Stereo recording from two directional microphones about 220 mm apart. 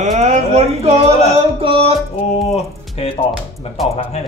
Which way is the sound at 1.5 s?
25° right (ahead or behind).